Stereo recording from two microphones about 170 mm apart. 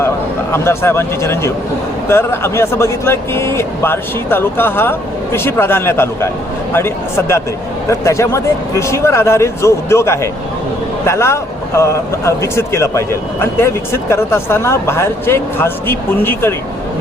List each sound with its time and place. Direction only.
0.5 s speech: 15° left (ahead or behind)